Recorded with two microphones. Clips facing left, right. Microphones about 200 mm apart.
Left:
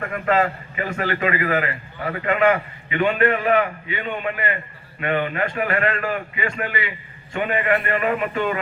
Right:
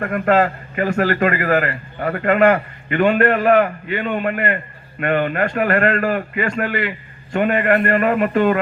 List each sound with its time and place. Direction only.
0.0 s a man's voice: 50° right (ahead or behind)